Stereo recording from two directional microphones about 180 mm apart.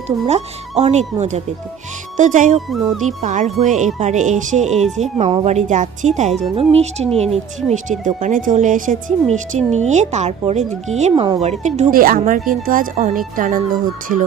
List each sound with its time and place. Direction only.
0.3 s speech: 35° right (ahead or behind)
2.6 s speech: centre (ahead or behind)
3.2 s speech: 40° right (ahead or behind)